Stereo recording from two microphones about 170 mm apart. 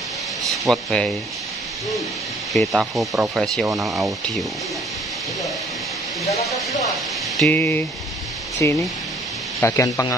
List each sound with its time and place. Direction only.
0.7 s speech: centre (ahead or behind)
2.5 s speech: centre (ahead or behind)
7.3 s speech: 10° left (ahead or behind)